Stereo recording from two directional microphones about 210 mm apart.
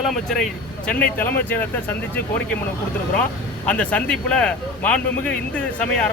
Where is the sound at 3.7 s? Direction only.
5° left (ahead or behind).